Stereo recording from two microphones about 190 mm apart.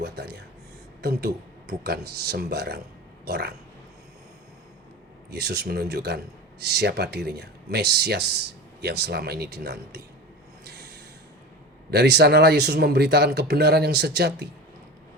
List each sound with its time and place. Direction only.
0.0 s a sound: 60° right (ahead or behind)
1.8 s speech: 60° right (ahead or behind)
5.3 s speech: 60° right (ahead or behind)
10.6 s snort: 60° right (ahead or behind)
11.9 s speech: 60° right (ahead or behind)